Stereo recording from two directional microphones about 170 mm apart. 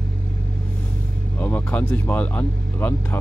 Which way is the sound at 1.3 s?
10° left (ahead or behind).